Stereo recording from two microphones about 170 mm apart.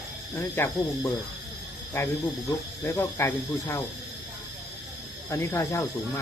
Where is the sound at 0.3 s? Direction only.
15° left (ahead or behind).